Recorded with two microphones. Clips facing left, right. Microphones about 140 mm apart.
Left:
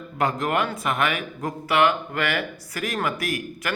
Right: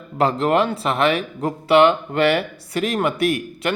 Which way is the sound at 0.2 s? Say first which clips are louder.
Right 6 dB; 30° right (ahead or behind).